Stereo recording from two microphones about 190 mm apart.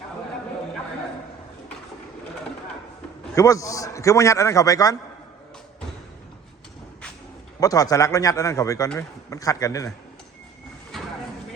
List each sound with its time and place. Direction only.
3.3 s a man's voice: 15° left (ahead or behind)
7.6 s a man's voice: 20° left (ahead or behind)
10.9 s a sound: centre (ahead or behind)